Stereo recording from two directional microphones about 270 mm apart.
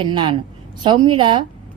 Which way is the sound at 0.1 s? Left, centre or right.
Centre.